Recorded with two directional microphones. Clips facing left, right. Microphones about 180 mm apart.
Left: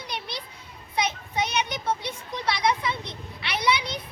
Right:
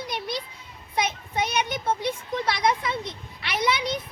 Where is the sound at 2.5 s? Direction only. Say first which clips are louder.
Left 2 dB; 50° right (ahead or behind).